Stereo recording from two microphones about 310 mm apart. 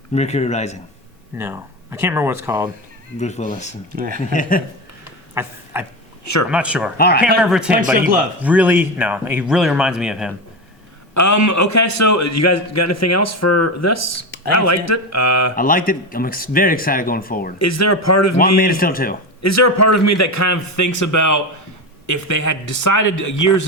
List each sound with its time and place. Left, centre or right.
0.1 s speech: left
1.4 s speech: centre
3.2 s speech: left
3.9 s speech: right
4.3 s speech: left
5.3 s speech: centre
6.9 s speech: left
7.4 s speech: centre
11.1 s a man's voice: left
15.5 s speech: left
17.6 s a man's voice: left
18.3 s speech: left
19.4 s a man's voice: left